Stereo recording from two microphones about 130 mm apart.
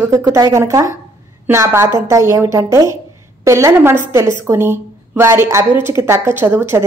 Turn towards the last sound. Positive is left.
turn(degrees=-20)  # may be behind; listen again after turning